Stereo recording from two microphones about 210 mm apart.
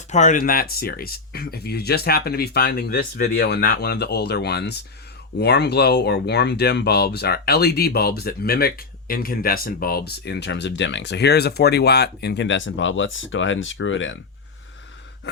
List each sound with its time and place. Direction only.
0.1 s speech: 35° left (ahead or behind); by 14.2 s 65° left (ahead or behind)